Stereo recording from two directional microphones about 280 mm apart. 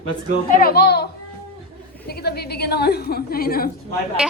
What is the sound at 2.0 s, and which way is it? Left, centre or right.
A woman's voice, left.